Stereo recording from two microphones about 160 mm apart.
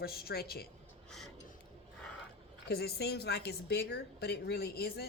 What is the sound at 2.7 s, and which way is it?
A woman's voice, 85° left.